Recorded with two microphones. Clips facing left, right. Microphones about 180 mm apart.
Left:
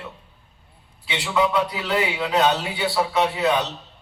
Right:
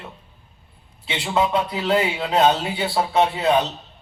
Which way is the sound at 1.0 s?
45° right (ahead or behind).